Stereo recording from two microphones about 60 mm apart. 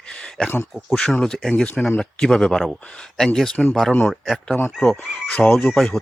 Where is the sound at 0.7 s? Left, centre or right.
Centre.